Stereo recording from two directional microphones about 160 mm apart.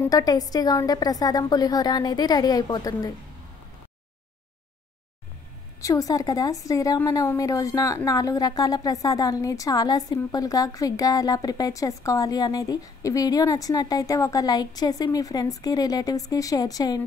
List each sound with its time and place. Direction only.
0.0 s a woman's voice: 20° left (ahead or behind)
5.8 s a woman's voice: 20° left (ahead or behind)